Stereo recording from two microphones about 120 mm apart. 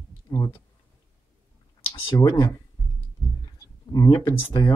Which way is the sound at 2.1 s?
30° left (ahead or behind).